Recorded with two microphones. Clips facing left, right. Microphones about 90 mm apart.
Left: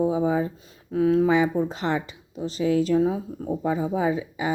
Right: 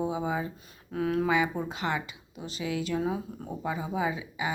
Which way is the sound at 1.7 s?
35° left (ahead or behind).